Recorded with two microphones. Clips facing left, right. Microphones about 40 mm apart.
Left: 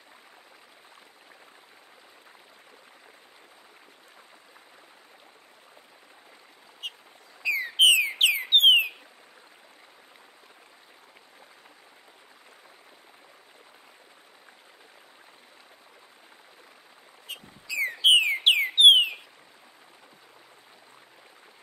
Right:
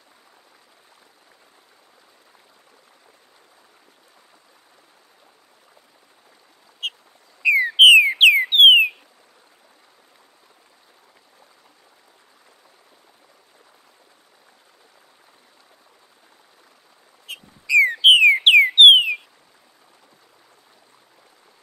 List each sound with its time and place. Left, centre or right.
7.4 s bird: right
17.3 s bird: right
18.5 s a sound: right